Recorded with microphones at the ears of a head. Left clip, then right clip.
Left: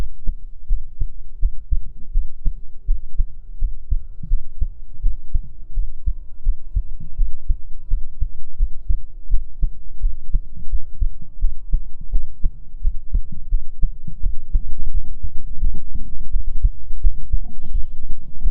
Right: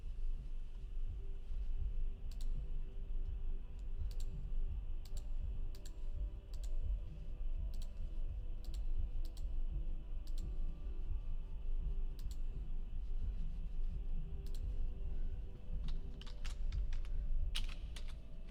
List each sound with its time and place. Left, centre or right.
0.3 s heart sounds: left